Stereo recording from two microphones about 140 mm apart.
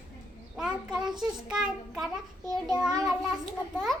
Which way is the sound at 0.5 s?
5° right (ahead or behind).